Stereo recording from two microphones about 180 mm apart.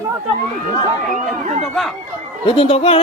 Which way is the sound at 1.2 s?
40° right (ahead or behind).